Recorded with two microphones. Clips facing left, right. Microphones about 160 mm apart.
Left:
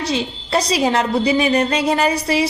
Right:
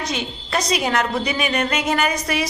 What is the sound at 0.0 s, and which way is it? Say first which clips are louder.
A woman's voice: left 5 dB; 30° left (ahead or behind).